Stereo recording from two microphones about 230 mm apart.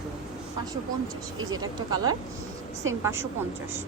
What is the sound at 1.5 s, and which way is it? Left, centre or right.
A woman's voice, centre.